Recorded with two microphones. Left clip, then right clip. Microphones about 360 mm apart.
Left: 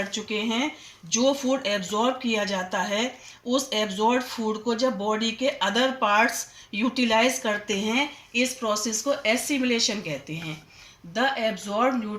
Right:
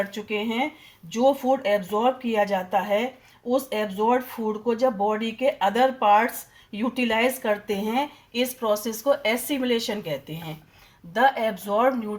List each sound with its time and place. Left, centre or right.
0.1 s speech: right